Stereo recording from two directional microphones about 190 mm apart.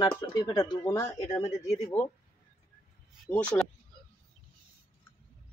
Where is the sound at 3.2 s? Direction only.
5° left (ahead or behind).